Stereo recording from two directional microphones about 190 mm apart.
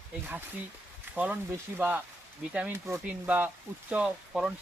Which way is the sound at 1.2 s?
10° right (ahead or behind).